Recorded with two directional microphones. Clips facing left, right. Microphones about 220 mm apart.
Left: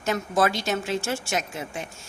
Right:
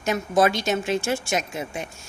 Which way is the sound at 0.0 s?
15° right (ahead or behind).